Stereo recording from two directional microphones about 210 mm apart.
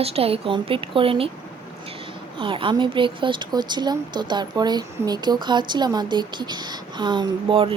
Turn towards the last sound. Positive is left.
turn(degrees=-25)  # may be behind; listen again after turning